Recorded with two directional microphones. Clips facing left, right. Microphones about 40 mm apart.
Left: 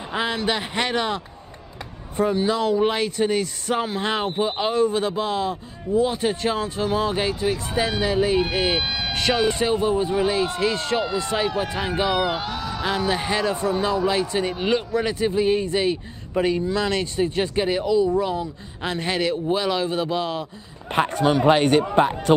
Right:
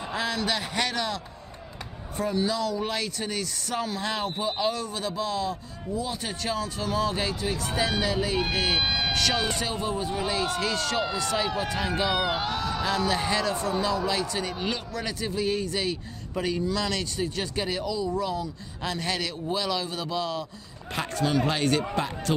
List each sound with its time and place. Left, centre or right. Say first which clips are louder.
0.1 s a man's voice: left 5 dB; left
8.8 s speech: even; centre
9.1 s a man's voice: left 5 dB; left
11.4 s speech: left 4 dB; centre
12.2 s a man's voice: left 3 dB; centre
12.8 s a man's voice: left 4 dB; centre